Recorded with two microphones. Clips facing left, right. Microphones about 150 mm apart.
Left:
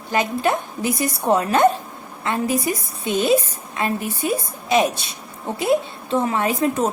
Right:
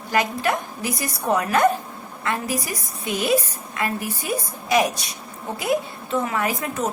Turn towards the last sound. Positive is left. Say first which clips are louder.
# left 5 dB
turn(degrees=25)  # may be behind; listen again after turning